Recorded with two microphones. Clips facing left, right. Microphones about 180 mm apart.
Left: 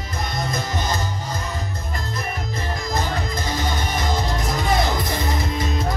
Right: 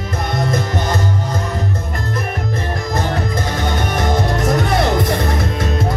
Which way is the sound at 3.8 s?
65° right (ahead or behind).